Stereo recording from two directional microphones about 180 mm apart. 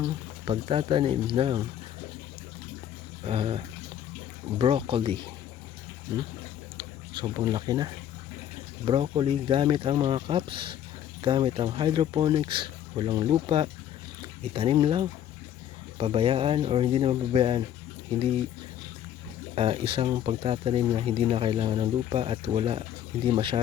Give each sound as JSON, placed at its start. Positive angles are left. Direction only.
{"t": 0.0, "sound": "speech", "side_deg": -30}
{"t": 3.2, "sound": "speech", "side_deg": -30}
{"t": 19.5, "sound": "speech", "side_deg": -30}